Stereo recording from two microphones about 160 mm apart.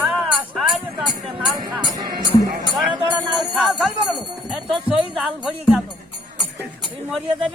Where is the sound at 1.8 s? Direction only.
30° right (ahead or behind).